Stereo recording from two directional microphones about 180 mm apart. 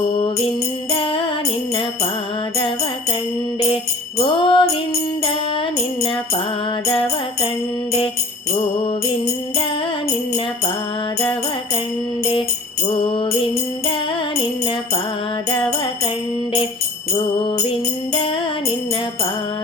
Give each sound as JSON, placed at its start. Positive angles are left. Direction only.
{"t": 0.9, "sound": "music", "side_deg": 30}
{"t": 4.2, "sound": "music", "side_deg": 25}
{"t": 12.9, "sound": "music", "side_deg": 30}
{"t": 17.4, "sound": "music", "side_deg": 30}